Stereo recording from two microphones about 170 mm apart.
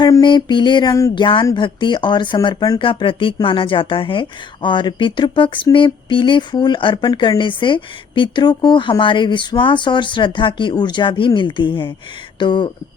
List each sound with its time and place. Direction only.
0.0 s speech: 25° left (ahead or behind)